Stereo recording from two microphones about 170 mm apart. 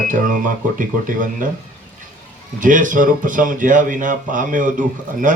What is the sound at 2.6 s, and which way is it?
Speech, 50° right (ahead or behind).